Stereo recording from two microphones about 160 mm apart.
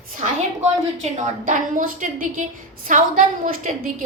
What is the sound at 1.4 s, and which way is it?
A child's voice, 55° right (ahead or behind).